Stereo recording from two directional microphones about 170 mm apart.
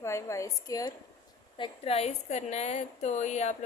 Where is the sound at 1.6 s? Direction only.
35° left (ahead or behind).